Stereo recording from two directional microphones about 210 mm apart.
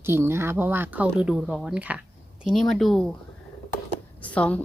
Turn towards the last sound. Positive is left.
turn(degrees=5)  # may be behind; listen again after turning